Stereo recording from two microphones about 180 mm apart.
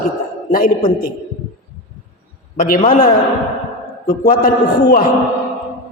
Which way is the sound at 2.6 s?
45° left (ahead or behind).